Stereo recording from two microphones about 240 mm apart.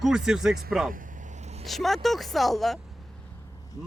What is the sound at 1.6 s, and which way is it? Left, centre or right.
Speech, centre.